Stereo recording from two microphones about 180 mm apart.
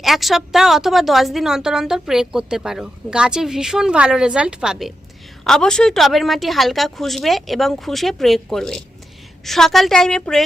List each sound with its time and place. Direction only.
0.0 s a woman's voice: centre (ahead or behind)